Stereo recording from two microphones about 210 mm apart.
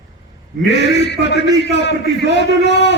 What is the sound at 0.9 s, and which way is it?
A man's voice, 55° left (ahead or behind).